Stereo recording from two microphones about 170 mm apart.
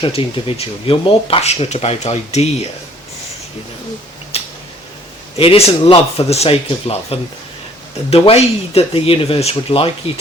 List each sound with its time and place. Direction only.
0.0 s speech: 30° left (ahead or behind)
4.3 s a sound: 35° left (ahead or behind)
5.4 s speech: 35° left (ahead or behind)